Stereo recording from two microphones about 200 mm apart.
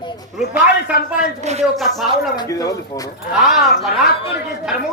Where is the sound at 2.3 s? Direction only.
20° left (ahead or behind).